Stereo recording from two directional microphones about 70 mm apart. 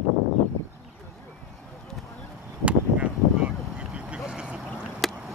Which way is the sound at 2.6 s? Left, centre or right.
Centre.